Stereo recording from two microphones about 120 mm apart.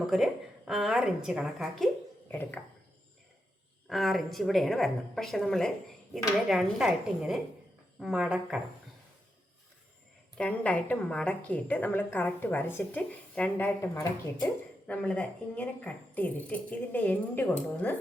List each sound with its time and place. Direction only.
0.1 s a woman's voice: 5° right (ahead or behind)
2.3 s speech: 15° left (ahead or behind)
3.8 s a woman's voice: centre (ahead or behind)
10.3 s speech: 10° left (ahead or behind)